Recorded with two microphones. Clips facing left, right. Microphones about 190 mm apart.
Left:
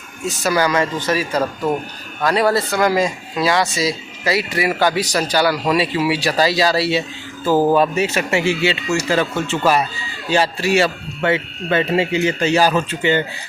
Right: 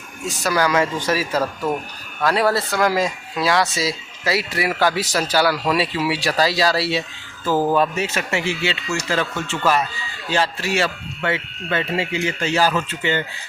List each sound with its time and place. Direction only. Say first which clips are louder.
0.3 s speech: left 2 dB; centre (ahead or behind)
7.8 s speech: left 4 dB; 10° left (ahead or behind)